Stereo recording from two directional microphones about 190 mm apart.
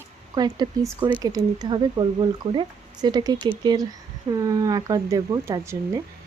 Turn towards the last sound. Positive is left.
turn(degrees=-15)  # may be behind; listen again after turning